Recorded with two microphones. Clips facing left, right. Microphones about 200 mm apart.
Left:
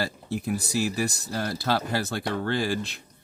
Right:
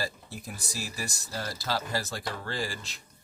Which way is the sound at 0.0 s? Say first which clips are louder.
Left 7 dB; 65° left (ahead or behind).